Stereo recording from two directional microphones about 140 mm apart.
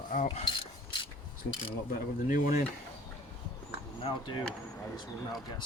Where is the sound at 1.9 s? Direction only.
75° left (ahead or behind).